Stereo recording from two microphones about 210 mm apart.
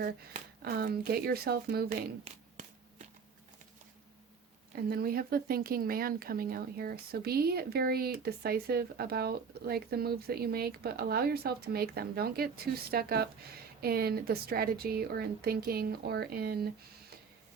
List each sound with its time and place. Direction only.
0.0 s speech: 45° right (ahead or behind)
2.3 s speech: 30° right (ahead or behind)
4.7 s speech: 45° right (ahead or behind)